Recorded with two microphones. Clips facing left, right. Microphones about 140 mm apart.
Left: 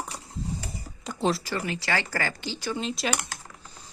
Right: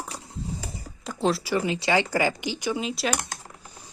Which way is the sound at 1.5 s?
15° right (ahead or behind).